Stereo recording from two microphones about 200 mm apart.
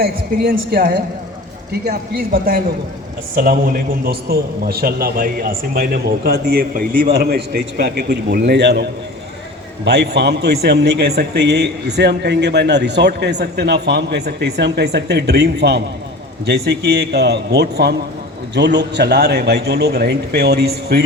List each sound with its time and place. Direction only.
0.0 s a man's voice: 50° right (ahead or behind)